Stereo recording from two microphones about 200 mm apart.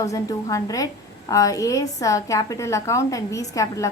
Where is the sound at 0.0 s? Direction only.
15° left (ahead or behind).